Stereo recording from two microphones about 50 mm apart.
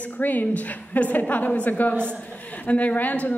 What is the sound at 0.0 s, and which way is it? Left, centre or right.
A woman's voice, left.